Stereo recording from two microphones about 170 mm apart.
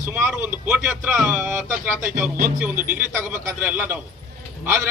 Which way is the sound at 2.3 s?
50° right (ahead or behind).